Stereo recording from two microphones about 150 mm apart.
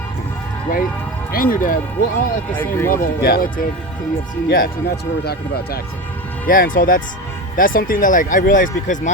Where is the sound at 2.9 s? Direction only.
80° left.